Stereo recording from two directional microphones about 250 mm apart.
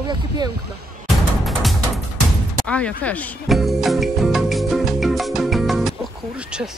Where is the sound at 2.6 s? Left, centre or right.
Centre.